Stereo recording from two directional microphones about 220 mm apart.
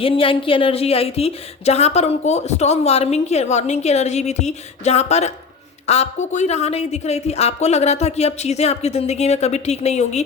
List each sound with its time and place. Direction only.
0.0 s speech: 25° left (ahead or behind)